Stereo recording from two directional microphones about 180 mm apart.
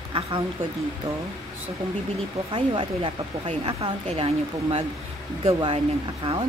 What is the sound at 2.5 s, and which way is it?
A woman's voice, 30° right (ahead or behind).